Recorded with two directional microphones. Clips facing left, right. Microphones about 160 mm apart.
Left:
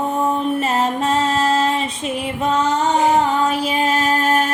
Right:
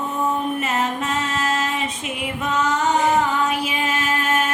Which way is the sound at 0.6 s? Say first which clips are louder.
Left 4 dB; 35° left (ahead or behind).